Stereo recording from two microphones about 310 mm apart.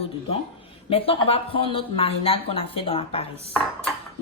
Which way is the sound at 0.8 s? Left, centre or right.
Centre.